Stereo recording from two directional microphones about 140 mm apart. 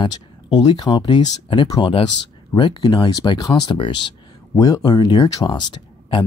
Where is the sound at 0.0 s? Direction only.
30° left (ahead or behind).